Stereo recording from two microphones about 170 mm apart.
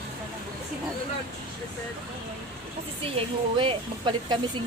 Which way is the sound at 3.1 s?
30° right (ahead or behind).